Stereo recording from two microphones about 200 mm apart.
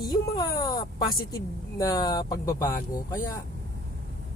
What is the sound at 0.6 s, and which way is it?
Speech, 20° left (ahead or behind).